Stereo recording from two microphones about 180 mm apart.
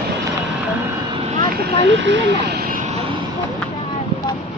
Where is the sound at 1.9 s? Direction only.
85° right; by 2.9 s 50° right (ahead or behind).